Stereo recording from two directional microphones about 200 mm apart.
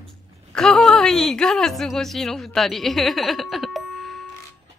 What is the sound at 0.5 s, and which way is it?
A woman's voice, centre (ahead or behind).